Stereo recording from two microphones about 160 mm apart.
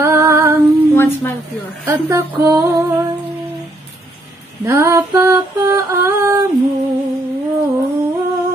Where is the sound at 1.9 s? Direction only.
15° right (ahead or behind).